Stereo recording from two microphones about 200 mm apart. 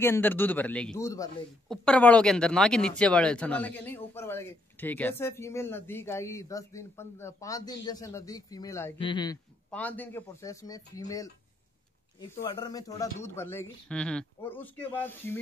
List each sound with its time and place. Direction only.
0.0 s speech: 10° left (ahead or behind)
1.7 s speech: 5° left (ahead or behind); by 9.4 s 20° left (ahead or behind)
9.7 s speech: 5° left (ahead or behind)